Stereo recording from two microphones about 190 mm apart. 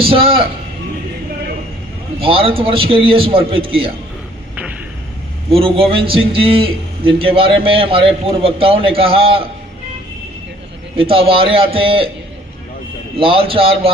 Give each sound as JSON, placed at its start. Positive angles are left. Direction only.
{"t": 0.0, "sound": "a man's voice", "side_deg": -30}
{"t": 2.2, "sound": "a man's voice", "side_deg": -30}
{"t": 5.5, "sound": "a man's voice", "side_deg": -30}
{"t": 10.9, "sound": "a man's voice", "side_deg": -30}
{"t": 13.1, "sound": "a man's voice", "side_deg": -30}